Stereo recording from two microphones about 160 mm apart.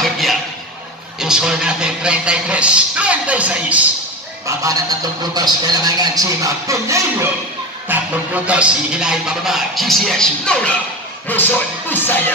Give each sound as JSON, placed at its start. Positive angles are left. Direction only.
{"t": 0.0, "sound": "a sound", "side_deg": 0}
{"t": 1.2, "sound": "speech", "side_deg": -5}
{"t": 4.5, "sound": "a man's voice", "side_deg": -20}
{"t": 7.9, "sound": "music", "side_deg": -10}